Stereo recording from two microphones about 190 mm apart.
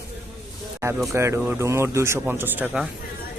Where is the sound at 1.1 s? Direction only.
15° right (ahead or behind).